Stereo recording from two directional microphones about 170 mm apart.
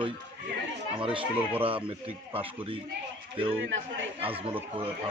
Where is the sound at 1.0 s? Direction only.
30° right (ahead or behind).